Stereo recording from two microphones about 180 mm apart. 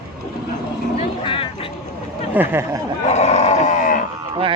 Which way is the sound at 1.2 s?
30° left (ahead or behind).